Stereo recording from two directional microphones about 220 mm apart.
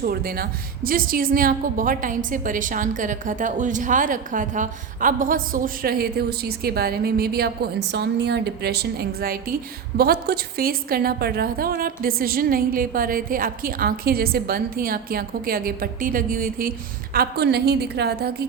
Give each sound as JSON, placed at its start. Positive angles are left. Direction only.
{"t": 0.0, "sound": "a woman's voice", "side_deg": -45}